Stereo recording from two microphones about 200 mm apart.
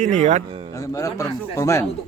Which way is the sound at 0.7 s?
15° left (ahead or behind).